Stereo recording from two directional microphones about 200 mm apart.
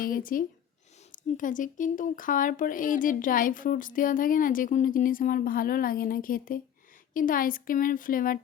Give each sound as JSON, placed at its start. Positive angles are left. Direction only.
{"t": 0.0, "sound": "speech", "side_deg": 45}